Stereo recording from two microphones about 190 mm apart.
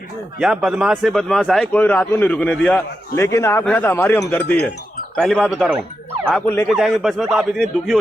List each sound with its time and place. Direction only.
0.3 s a man's voice: centre (ahead or behind)
6.7 s a man's voice: centre (ahead or behind)